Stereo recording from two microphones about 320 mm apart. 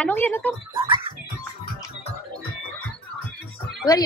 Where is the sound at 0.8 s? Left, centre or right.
Centre.